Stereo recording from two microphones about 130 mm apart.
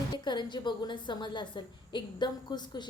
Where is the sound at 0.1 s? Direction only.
35° left (ahead or behind).